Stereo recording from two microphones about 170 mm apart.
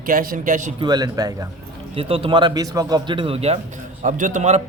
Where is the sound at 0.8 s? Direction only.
25° right (ahead or behind).